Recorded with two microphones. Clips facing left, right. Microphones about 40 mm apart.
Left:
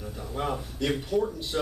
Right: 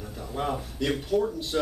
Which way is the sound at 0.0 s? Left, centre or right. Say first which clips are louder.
Right 1 dB; centre.